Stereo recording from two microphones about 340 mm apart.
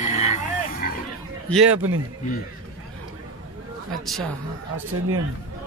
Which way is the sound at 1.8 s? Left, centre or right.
Right.